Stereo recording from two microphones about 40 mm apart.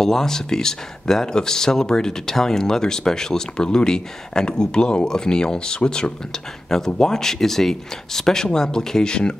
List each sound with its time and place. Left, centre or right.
0.0 s speech: centre